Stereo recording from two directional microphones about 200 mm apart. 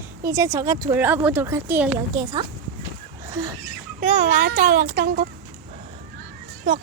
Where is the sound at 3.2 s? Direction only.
15° right (ahead or behind).